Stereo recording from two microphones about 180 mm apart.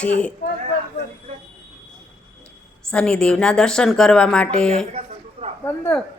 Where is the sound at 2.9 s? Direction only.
5° left (ahead or behind).